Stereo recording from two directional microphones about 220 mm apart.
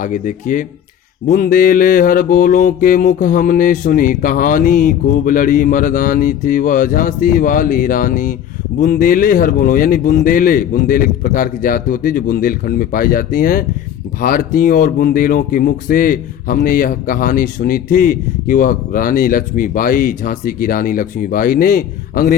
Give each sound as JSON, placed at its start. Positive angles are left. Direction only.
{"t": 0.0, "sound": "speech", "side_deg": 35}